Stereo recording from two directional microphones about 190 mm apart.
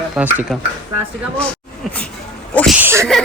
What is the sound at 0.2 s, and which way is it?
Speech, 10° right (ahead or behind).